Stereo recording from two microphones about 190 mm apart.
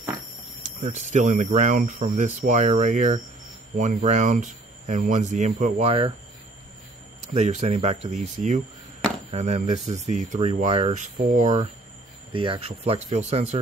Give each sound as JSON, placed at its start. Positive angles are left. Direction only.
{"t": 0.6, "sound": "speech", "side_deg": -40}
{"t": 7.3, "sound": "speech", "side_deg": -35}
{"t": 12.3, "sound": "speech", "side_deg": -30}